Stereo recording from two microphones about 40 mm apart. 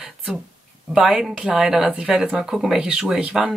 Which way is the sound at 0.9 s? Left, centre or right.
Centre.